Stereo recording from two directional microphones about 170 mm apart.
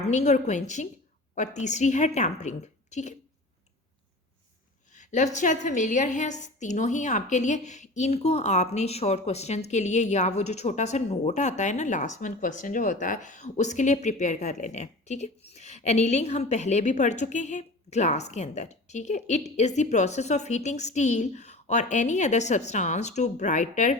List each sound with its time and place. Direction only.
0.1 s a woman's voice: 45° left (ahead or behind)
4.9 s a woman's voice: 45° left (ahead or behind)